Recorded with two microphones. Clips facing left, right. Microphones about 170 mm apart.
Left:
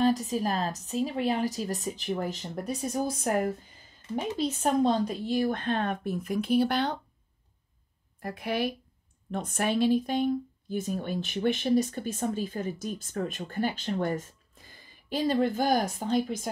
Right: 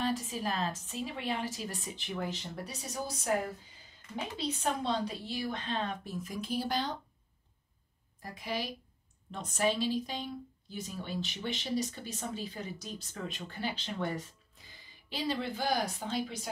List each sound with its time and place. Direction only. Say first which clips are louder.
0.2 s a woman's voice: left 6 dB; 40° left (ahead or behind); by 7.0 s 65° left (ahead or behind)
8.2 s a woman's voice: left 8 dB; 60° left (ahead or behind)